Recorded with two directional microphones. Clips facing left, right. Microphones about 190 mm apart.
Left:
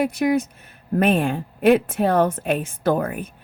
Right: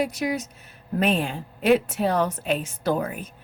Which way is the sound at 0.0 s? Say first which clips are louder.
Left 6 dB; 55° left (ahead or behind).